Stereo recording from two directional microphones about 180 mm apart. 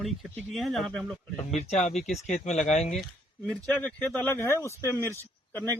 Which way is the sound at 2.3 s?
40° left (ahead or behind).